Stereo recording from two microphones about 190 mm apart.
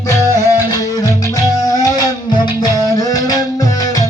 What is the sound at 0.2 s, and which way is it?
Music, 20° left (ahead or behind).